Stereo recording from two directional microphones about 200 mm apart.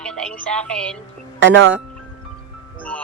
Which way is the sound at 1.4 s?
65° right (ahead or behind).